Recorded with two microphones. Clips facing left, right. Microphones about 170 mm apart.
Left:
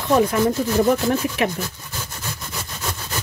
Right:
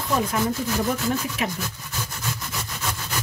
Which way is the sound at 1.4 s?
65° left (ahead or behind).